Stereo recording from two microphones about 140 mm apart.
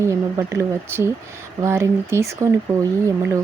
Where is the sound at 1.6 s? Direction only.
20° right (ahead or behind).